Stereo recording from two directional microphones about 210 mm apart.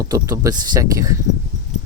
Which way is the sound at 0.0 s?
15° right (ahead or behind).